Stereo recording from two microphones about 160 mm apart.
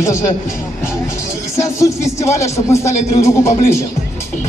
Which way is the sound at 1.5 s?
20° left (ahead or behind).